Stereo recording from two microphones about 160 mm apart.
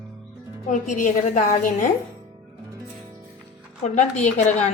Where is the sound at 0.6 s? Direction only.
55° left (ahead or behind).